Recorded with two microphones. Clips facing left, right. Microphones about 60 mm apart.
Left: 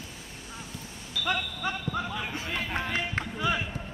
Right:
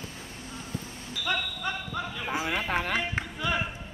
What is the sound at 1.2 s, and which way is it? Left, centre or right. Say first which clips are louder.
Basketball bounce: even; centre.